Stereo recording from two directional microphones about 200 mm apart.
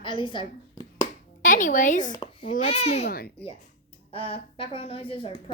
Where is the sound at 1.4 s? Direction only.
40° left (ahead or behind).